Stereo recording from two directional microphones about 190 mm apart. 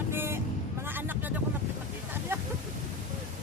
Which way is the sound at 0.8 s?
10° right (ahead or behind).